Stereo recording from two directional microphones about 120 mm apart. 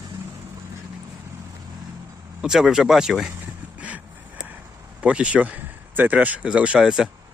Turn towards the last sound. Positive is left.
turn(degrees=-5)  # may be behind; listen again after turning